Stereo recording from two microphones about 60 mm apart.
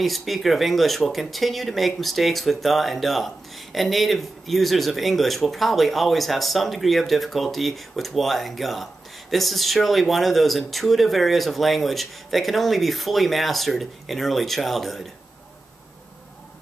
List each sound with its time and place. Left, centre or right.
0.0 s speech: centre